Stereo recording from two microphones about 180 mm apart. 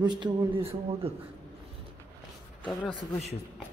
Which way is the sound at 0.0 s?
25° right (ahead or behind).